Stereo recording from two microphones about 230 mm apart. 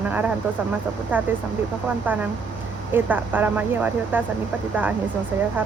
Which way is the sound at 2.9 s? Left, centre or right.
Centre.